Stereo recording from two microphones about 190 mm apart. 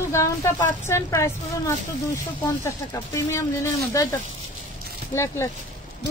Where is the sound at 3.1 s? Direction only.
15° left (ahead or behind).